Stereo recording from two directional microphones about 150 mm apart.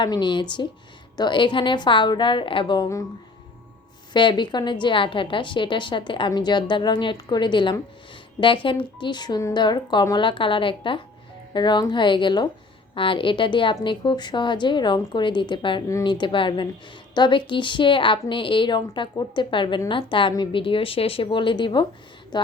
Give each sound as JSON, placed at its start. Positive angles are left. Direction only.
{"t": 0.0, "sound": "a woman's voice", "side_deg": 30}
{"t": 4.1, "sound": "a woman's voice", "side_deg": 30}